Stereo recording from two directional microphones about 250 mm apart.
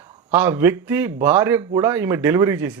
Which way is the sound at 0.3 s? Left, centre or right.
Centre.